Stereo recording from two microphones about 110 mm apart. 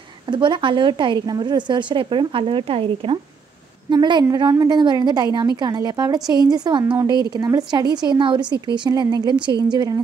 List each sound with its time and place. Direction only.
0.3 s a woman's voice: 45° right (ahead or behind)
3.9 s speech: 40° right (ahead or behind)